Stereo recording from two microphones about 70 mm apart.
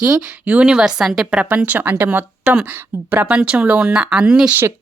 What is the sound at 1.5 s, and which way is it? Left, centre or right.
Speech, right.